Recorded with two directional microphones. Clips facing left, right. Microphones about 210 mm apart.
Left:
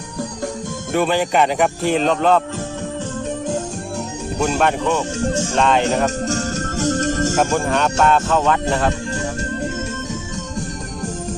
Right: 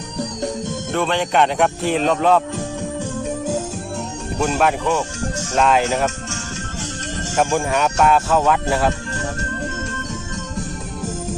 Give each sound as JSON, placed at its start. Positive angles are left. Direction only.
{"t": 0.9, "sound": "speech", "side_deg": 5}
{"t": 4.4, "sound": "speech", "side_deg": -5}
{"t": 6.2, "sound": "music", "side_deg": 40}
{"t": 7.5, "sound": "speech", "side_deg": -5}